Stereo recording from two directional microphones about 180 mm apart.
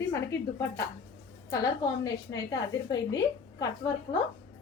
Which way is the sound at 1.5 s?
20° left (ahead or behind).